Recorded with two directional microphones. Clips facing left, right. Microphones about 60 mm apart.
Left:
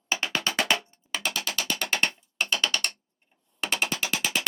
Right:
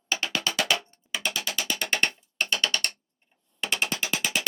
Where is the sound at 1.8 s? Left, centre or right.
Centre.